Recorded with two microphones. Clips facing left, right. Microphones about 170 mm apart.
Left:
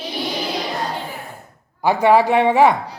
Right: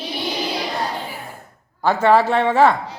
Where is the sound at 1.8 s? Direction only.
15° left (ahead or behind).